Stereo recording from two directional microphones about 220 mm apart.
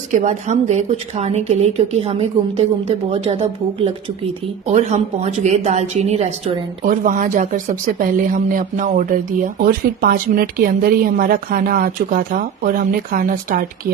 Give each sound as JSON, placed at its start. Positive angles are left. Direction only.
{"t": 0.2, "sound": "a woman's voice", "side_deg": -35}